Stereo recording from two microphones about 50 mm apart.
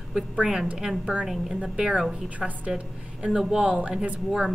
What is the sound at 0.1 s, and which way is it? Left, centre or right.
A woman's voice, right.